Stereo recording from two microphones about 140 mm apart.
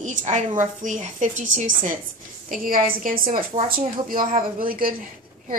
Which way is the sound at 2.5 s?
85° right.